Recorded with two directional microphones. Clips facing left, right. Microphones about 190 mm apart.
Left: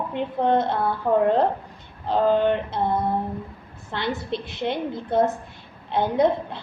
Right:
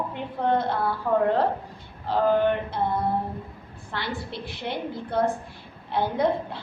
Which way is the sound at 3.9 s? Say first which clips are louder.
Left 5 dB; 20° left (ahead or behind).